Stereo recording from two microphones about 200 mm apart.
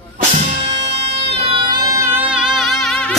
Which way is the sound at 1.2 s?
30° right (ahead or behind).